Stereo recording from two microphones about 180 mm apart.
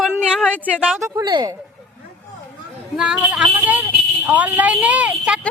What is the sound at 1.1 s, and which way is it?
Speech, 20° right (ahead or behind).